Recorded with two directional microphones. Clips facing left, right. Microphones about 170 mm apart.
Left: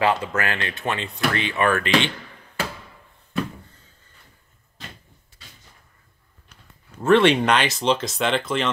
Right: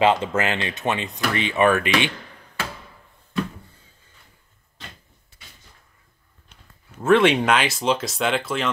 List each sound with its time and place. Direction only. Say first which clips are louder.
0.0 s speech: right 3 dB; 25° right (ahead or behind)
7.0 s speech: even; 5° right (ahead or behind)